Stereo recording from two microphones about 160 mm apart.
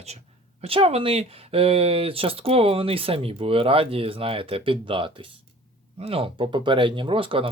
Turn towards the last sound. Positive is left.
turn(degrees=-35)  # may be behind; listen again after turning